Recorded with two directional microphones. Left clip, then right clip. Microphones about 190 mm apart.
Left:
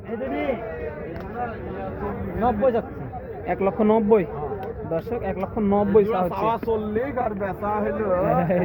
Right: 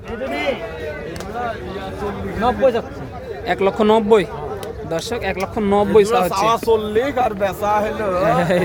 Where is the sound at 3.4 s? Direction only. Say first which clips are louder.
Right 6 dB; 20° right (ahead or behind).